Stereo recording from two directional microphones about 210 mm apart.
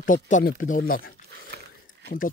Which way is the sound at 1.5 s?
50° right (ahead or behind).